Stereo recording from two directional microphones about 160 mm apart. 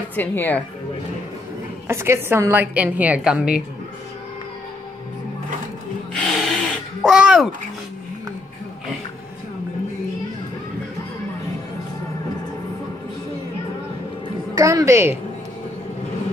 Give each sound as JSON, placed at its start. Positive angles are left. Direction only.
{"t": 0.1, "sound": "a woman's voice", "side_deg": 10}
{"t": 1.9, "sound": "a woman's voice", "side_deg": -15}
{"t": 6.1, "sound": "wood", "side_deg": 5}
{"t": 7.0, "sound": "speech", "side_deg": -5}
{"t": 14.5, "sound": "a woman's voice", "side_deg": -20}